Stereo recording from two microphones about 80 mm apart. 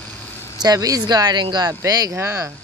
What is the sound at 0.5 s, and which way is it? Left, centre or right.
A woman's voice, right.